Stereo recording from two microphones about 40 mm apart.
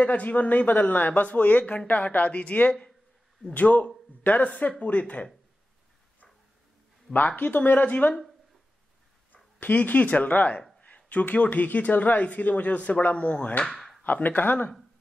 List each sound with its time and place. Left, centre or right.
0.0 s speech: left
7.3 s speech: left
9.3 s speech: left
13.7 s a sound: centre
14.0 s speech: left